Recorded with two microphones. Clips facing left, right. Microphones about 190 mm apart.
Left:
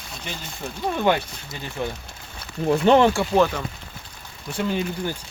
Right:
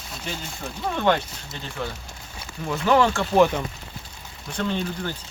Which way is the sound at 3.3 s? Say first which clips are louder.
Right 4 dB; 15° right (ahead or behind).